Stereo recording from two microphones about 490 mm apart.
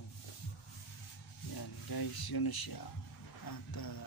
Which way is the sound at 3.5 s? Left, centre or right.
Left.